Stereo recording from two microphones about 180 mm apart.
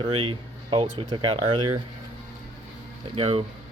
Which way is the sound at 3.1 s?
30° right (ahead or behind).